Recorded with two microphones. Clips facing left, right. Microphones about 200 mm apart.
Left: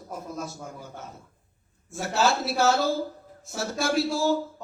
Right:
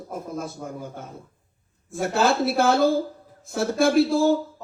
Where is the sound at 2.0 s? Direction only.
55° right (ahead or behind).